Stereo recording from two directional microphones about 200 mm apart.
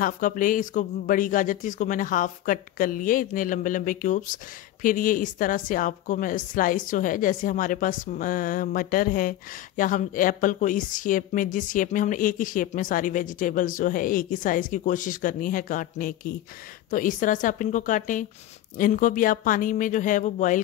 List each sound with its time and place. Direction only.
0.0 s a woman's voice: 40° left (ahead or behind)